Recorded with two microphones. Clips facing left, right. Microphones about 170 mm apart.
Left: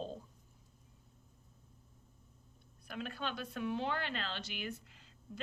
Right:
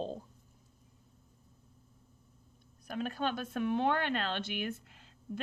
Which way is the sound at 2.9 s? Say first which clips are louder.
Right 7 dB; 45° right (ahead or behind).